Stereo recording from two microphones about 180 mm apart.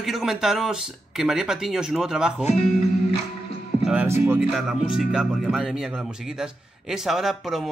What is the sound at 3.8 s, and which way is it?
Speech, 10° right (ahead or behind).